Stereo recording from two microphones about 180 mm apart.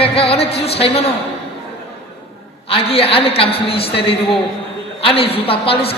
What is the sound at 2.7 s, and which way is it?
A woman's voice, 30° left (ahead or behind).